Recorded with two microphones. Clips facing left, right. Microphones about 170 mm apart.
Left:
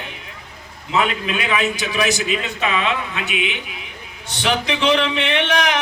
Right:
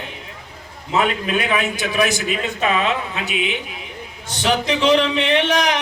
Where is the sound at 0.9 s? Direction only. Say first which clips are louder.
Right 1 dB; 45° right (ahead or behind).